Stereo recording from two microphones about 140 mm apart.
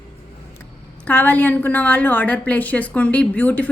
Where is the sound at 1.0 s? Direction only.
10° left (ahead or behind).